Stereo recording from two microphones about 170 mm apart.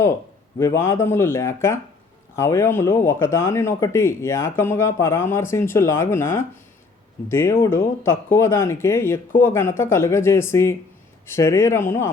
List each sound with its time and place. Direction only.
0.6 s speech: 15° left (ahead or behind)